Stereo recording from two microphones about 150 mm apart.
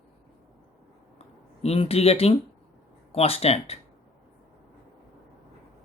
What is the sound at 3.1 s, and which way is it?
Speech, 40° left (ahead or behind).